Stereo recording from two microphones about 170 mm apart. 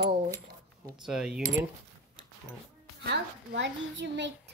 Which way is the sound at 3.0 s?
90° right.